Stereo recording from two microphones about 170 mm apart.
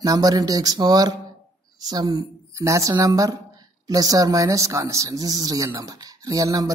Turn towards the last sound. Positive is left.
turn(degrees=-20)  # may be behind; listen again after turning